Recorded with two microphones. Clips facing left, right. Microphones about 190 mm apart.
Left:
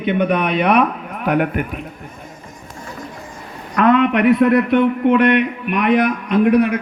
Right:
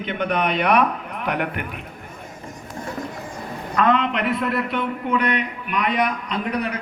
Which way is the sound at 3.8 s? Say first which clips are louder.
Left 6 dB; 55° left (ahead or behind).